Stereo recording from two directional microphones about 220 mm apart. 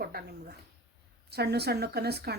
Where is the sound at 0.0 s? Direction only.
45° right (ahead or behind).